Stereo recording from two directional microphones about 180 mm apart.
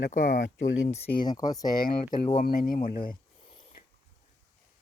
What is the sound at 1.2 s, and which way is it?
Speech, 20° left (ahead or behind).